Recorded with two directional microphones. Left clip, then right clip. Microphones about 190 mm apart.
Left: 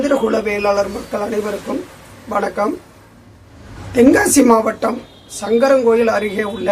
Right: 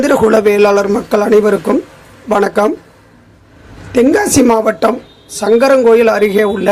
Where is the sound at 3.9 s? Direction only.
25° right (ahead or behind).